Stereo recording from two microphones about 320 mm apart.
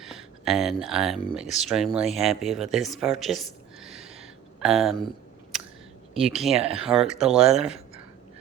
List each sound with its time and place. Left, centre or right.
0.0 s speech: centre
2.4 s a sound: centre
6.1 s speech: centre
6.6 s speech: centre
6.8 s speech: centre